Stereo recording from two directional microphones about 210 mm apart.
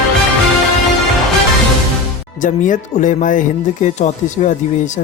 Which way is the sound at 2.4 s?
35° left (ahead or behind).